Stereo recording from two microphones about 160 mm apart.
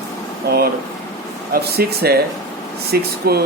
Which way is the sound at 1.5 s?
75° right (ahead or behind).